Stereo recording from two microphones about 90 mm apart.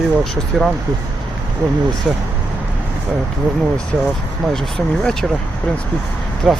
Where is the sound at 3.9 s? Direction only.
10° left (ahead or behind).